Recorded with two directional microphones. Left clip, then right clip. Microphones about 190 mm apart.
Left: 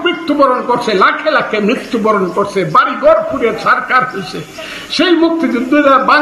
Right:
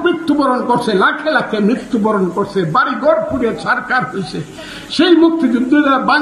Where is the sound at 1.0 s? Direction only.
55° right (ahead or behind).